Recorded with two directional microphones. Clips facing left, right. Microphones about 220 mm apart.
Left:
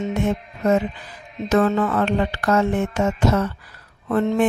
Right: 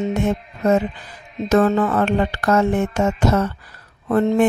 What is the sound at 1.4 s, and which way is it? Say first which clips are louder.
Speech: right 2 dB; 40° right (ahead or behind).